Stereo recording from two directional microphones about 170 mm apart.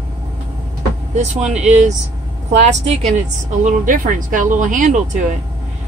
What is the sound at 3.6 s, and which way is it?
Speech, 50° right (ahead or behind).